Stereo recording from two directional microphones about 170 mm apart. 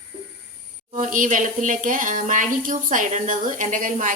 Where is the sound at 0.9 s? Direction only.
50° right (ahead or behind).